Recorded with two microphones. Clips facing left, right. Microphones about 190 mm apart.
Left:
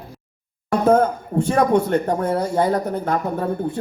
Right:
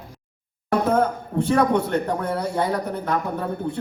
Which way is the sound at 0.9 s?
50° left (ahead or behind).